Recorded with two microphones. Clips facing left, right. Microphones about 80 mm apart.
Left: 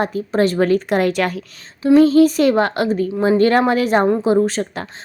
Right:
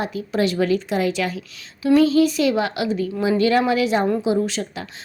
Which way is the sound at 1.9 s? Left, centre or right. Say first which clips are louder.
Left 5 dB; left.